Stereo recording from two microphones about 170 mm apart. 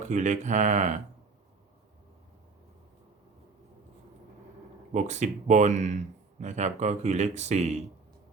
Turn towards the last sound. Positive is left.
turn(degrees=-40)  # may be behind; listen again after turning